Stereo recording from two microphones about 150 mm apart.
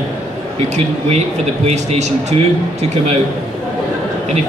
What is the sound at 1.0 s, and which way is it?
A man's voice, 45° right (ahead or behind).